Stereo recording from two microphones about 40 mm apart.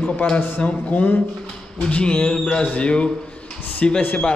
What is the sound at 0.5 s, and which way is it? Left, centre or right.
Speech, left.